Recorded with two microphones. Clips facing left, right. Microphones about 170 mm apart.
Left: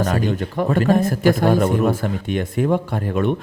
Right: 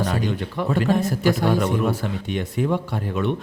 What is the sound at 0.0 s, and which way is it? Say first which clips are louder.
Speech: left 3 dB; 50° left (ahead or behind).